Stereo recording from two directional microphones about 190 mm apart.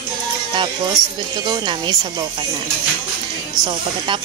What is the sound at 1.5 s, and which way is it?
Speech, 20° right (ahead or behind).